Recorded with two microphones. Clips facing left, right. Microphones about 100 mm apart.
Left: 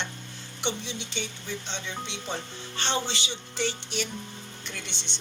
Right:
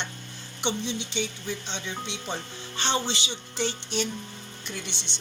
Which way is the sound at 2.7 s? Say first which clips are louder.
Right 2 dB; 20° right (ahead or behind).